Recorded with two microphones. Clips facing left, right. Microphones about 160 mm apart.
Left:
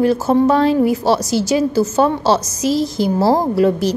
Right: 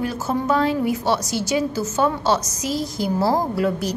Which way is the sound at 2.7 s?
90° left.